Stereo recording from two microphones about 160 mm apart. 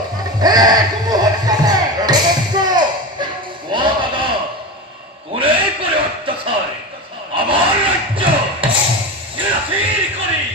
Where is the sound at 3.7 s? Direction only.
30° right (ahead or behind).